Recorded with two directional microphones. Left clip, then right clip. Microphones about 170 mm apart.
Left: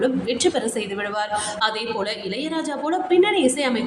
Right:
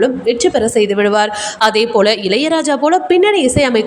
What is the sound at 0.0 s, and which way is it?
A woman's voice, 40° right (ahead or behind).